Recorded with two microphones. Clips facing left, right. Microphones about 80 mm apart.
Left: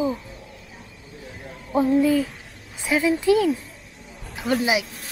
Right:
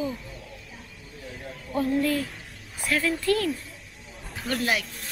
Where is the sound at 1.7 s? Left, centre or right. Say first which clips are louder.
Left 6 dB; centre.